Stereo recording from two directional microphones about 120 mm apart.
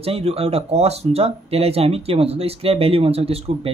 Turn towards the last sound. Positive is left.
turn(degrees=-55)  # may be behind; listen again after turning